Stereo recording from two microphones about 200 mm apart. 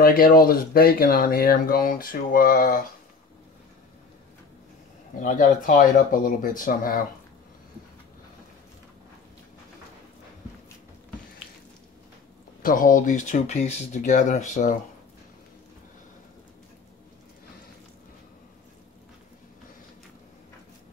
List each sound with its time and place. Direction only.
0.0 s speech: 45° left (ahead or behind)
5.2 s speech: 40° left (ahead or behind)
12.6 s speech: 40° left (ahead or behind)